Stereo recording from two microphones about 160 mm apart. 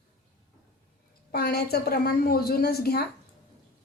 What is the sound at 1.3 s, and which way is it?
A woman's voice, 80° left.